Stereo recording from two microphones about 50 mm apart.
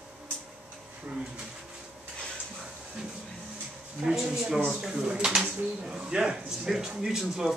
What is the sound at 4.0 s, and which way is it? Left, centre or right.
Speech, centre.